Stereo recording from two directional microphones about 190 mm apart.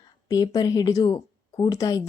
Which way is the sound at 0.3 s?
20° left (ahead or behind).